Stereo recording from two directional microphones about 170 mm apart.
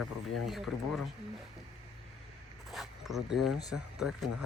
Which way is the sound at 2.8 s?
Centre (ahead or behind).